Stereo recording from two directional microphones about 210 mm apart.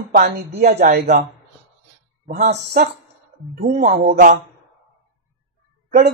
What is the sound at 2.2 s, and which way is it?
Speech, 40° right (ahead or behind).